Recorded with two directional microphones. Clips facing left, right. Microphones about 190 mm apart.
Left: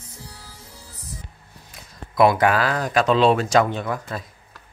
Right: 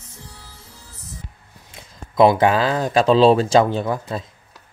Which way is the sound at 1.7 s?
25° right (ahead or behind).